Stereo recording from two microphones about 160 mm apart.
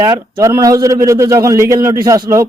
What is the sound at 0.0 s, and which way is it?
A man's voice, 25° right (ahead or behind).